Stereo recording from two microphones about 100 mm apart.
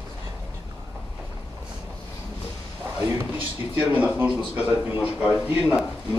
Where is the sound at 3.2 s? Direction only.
20° right (ahead or behind).